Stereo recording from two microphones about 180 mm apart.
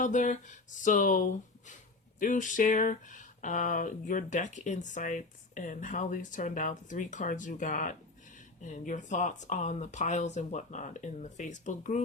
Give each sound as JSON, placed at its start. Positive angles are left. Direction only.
{"t": 0.0, "sound": "speech", "side_deg": 45}